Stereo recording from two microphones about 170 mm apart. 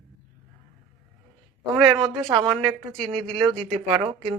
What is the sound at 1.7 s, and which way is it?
Speech, 25° right (ahead or behind).